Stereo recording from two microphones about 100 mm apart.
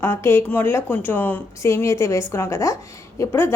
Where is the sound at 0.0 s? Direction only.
25° left (ahead or behind).